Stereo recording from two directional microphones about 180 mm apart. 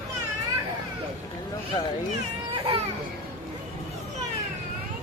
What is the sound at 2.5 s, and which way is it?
Children playing, 30° right (ahead or behind).